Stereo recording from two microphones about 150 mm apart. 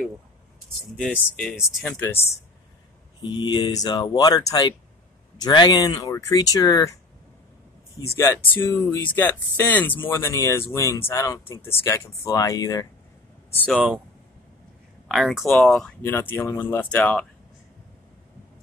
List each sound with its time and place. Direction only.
1.0 s speech: 5° left (ahead or behind)
3.2 s speech: 30° left (ahead or behind)
8.5 s speech: 15° left (ahead or behind)
13.7 s speech: 10° right (ahead or behind)
15.0 s speech: centre (ahead or behind)
16.0 s speech: 15° left (ahead or behind)